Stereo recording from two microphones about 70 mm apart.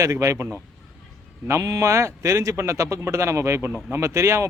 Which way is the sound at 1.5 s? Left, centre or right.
Right.